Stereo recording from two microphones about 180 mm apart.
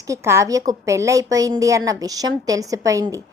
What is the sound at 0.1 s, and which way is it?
A woman's voice, 15° right (ahead or behind).